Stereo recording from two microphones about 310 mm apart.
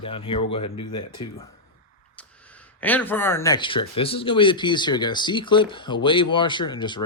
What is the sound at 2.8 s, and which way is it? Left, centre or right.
Speech, centre.